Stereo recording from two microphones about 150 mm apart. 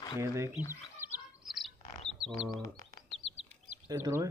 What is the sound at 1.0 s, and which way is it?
Chirp, 15° right (ahead or behind).